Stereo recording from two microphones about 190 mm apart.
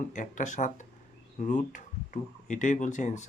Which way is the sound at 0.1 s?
40° left (ahead or behind).